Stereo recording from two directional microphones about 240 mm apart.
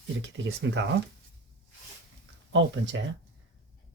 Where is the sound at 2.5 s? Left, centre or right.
Right.